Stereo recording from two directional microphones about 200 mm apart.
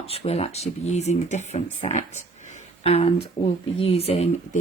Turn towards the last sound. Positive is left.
turn(degrees=30)  # may be behind; listen again after turning